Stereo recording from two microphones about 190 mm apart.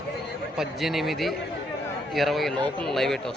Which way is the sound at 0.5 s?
Centre (ahead or behind).